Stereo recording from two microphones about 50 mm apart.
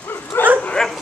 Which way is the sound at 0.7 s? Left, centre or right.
Centre.